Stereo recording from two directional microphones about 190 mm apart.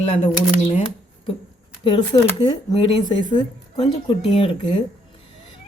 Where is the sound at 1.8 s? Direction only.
25° left (ahead or behind).